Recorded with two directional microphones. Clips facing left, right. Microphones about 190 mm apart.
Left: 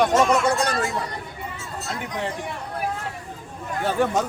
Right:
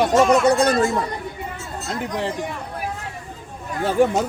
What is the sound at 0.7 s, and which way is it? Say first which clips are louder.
Speech: right 7 dB; 45° right (ahead or behind).